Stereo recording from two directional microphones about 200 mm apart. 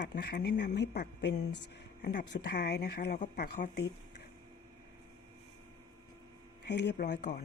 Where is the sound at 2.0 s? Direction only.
50° left (ahead or behind).